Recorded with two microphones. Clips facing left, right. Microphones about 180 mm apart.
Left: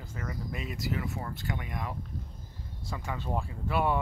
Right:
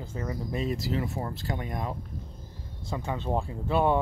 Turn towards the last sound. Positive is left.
turn(degrees=-25)  # may be behind; listen again after turning